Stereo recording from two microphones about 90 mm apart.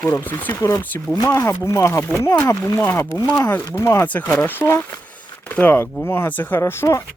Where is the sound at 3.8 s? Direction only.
30° left (ahead or behind).